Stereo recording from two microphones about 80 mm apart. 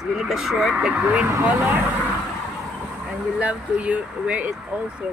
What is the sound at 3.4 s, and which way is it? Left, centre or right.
Speech, centre.